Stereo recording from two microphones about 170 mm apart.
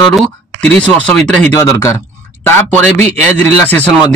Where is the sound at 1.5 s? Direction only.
20° left (ahead or behind).